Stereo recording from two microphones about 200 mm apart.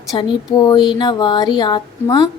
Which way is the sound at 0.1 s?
25° left (ahead or behind).